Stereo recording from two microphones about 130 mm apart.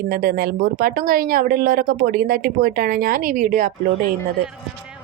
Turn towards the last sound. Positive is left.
turn(degrees=-90)